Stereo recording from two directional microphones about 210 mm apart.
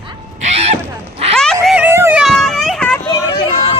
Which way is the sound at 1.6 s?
5° right (ahead or behind).